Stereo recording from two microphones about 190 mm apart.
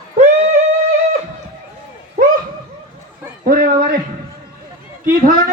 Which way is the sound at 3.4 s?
45° right (ahead or behind).